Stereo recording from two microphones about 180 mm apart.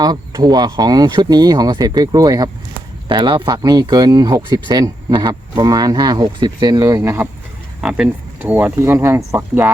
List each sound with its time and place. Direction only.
0.0 s speech: 20° right (ahead or behind)
7.8 s speech: 5° right (ahead or behind)